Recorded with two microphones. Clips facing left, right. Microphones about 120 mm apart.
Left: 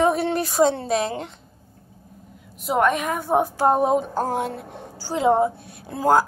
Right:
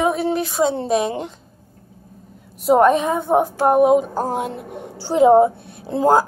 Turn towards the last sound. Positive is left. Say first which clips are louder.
# right 3 dB
turn(degrees=-20)  # may be behind; listen again after turning